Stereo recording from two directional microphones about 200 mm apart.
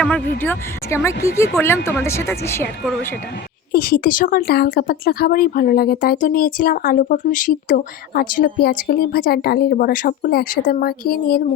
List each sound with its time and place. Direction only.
0.0 s speech: 10° left (ahead or behind)
3.7 s speech: 50° left (ahead or behind)